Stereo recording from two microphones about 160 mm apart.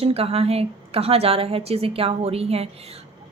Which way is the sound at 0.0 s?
40° right (ahead or behind).